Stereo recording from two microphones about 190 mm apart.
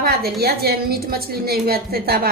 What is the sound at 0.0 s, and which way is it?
A woman's voice, 55° right (ahead or behind).